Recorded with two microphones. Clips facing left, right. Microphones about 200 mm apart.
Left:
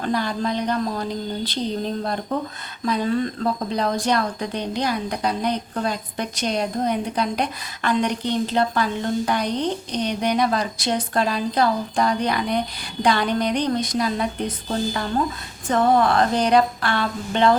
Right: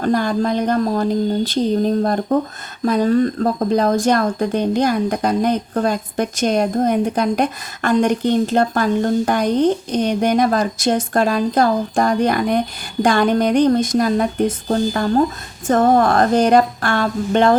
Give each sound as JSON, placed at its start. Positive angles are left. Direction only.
{"t": 0.0, "sound": "speech", "side_deg": -45}